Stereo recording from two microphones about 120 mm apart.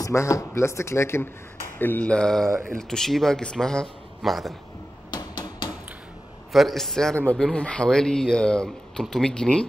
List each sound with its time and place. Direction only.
0.0 s speech: 25° left (ahead or behind); by 4.6 s centre (ahead or behind)
5.1 s a sound: 35° left (ahead or behind)
6.5 s speech: centre (ahead or behind)